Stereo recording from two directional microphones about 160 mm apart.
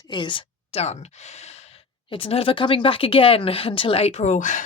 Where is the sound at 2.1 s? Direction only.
35° left (ahead or behind).